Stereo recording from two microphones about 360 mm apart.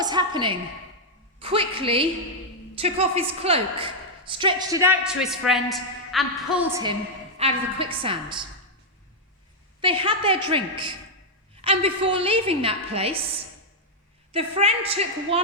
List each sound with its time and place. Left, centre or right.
0.0 s a sound: centre
1.4 s a woman's voice: centre
7.3 s a woman's voice: centre
9.8 s a woman's voice: centre
11.6 s a woman's voice: centre
14.3 s a woman's voice: centre